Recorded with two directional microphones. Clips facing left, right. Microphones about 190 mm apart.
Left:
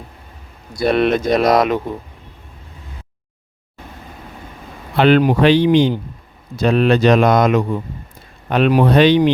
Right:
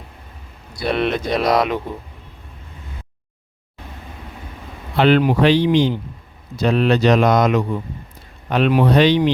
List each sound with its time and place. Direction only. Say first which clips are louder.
0.7 s speech: left 5 dB; 45° left (ahead or behind)
4.9 s speech: left 2 dB; 55° left (ahead or behind)